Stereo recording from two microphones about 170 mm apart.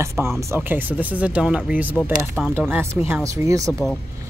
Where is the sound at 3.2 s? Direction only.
20° right (ahead or behind).